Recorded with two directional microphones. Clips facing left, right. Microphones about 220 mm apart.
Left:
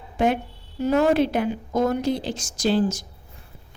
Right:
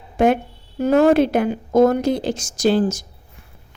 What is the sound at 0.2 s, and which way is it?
A woman's voice, 45° right (ahead or behind).